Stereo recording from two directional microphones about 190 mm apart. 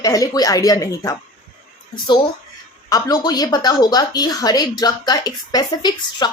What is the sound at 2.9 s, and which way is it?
Speech, 20° left (ahead or behind).